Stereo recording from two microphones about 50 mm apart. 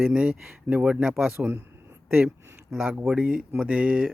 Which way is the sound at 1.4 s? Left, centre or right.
Centre.